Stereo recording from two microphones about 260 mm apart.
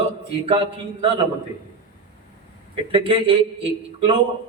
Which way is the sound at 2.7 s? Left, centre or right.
Centre.